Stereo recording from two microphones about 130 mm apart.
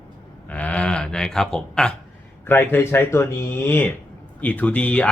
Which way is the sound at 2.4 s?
15° left (ahead or behind).